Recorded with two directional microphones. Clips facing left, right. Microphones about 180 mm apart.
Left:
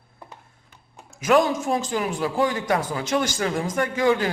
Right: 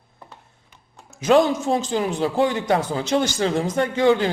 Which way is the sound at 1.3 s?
25° right (ahead or behind).